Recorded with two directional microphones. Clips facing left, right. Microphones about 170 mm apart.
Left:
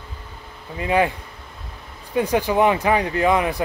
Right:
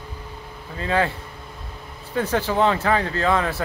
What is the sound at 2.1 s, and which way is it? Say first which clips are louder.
Speech: left 3 dB; 15° left (ahead or behind).